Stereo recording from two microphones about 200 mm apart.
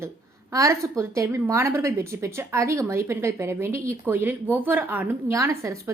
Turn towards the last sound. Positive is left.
turn(degrees=-15)  # may be behind; listen again after turning